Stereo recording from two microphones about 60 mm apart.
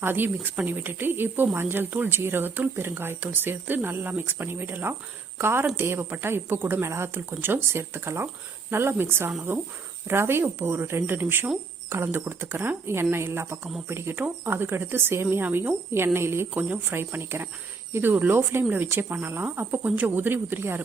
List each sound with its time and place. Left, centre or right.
0.0 s speech: right